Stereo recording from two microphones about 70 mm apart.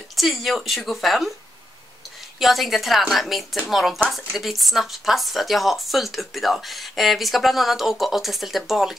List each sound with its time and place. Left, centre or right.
0.1 s speech: centre
2.3 s speech: centre